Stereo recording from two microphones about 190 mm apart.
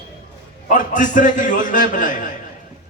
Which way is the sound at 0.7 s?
40° left (ahead or behind).